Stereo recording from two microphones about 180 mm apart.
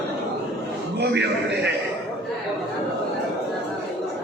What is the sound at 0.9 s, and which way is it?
Speech, 65° right (ahead or behind).